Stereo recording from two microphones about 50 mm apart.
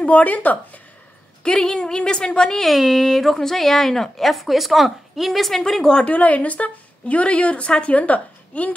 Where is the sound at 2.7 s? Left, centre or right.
Centre.